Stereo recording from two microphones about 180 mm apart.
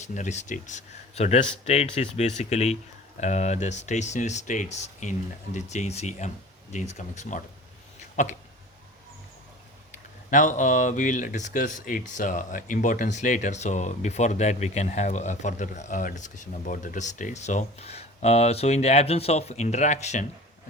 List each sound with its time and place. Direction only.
0.0 s speech: 40° left (ahead or behind)
8.1 s a sound: 40° left (ahead or behind)
9.9 s speech: 45° left (ahead or behind)